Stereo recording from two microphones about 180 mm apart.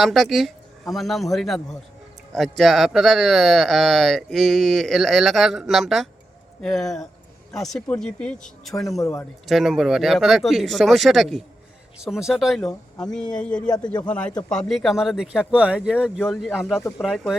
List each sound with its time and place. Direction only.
0.0 s speech: centre (ahead or behind)
9.0 s a man's voice: 20° left (ahead or behind)
9.5 s a man's voice: centre (ahead or behind)